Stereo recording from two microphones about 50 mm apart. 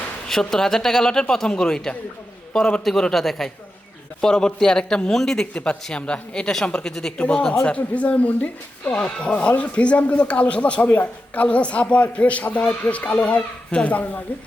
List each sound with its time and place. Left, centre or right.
0.3 s a man's voice: centre
2.8 s speech: centre
6.5 s a man's voice: centre; by 8.9 s left
8.9 s a man's voice: centre; by 14.2 s left